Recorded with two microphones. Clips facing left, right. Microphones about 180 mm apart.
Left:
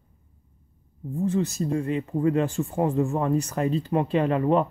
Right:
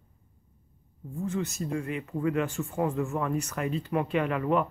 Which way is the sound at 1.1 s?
30° left (ahead or behind).